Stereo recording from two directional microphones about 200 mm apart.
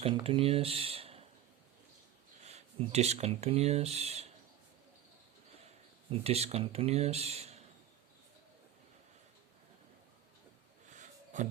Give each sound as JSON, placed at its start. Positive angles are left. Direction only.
{"t": 0.0, "sound": "speech", "side_deg": -30}
{"t": 2.4, "sound": "speech", "side_deg": -35}
{"t": 6.1, "sound": "speech", "side_deg": -30}
{"t": 10.9, "sound": "a sound", "side_deg": -40}